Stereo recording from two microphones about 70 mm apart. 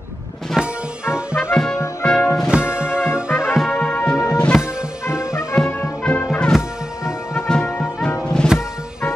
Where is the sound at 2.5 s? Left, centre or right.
Centre.